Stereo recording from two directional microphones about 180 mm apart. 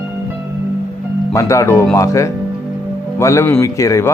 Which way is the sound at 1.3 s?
15° left (ahead or behind).